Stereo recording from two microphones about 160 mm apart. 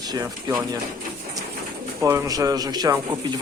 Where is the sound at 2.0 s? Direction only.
20° right (ahead or behind).